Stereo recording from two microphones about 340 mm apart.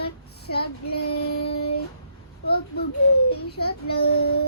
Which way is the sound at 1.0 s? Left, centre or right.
Left.